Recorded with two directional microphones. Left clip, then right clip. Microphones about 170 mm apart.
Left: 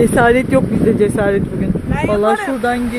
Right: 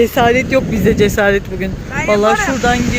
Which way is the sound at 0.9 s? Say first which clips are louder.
Right 4 dB; 5° left (ahead or behind).